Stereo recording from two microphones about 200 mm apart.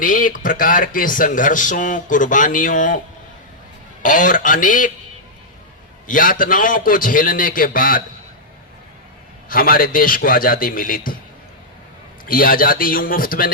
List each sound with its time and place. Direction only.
0.0 s speech: 40° left (ahead or behind)
4.0 s speech: 40° left (ahead or behind)
6.1 s a man's voice: 45° left (ahead or behind)
9.5 s a man's voice: 45° left (ahead or behind)
12.2 s a man's voice: 45° left (ahead or behind)